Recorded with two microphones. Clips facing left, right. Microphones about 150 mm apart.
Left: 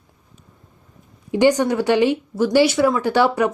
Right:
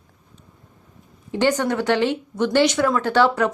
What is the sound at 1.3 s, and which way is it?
Speech, 10° left (ahead or behind).